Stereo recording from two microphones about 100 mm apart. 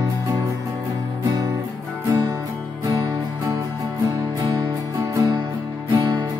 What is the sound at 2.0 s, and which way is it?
Music, 35° right (ahead or behind).